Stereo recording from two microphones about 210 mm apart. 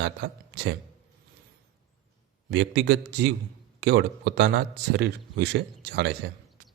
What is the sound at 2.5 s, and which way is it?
A man's voice, 55° right (ahead or behind).